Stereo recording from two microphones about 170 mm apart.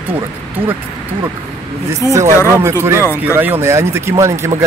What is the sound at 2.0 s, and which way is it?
Speech, 15° right (ahead or behind).